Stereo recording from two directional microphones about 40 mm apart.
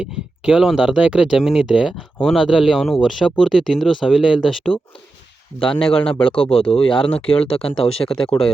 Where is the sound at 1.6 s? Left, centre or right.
Right.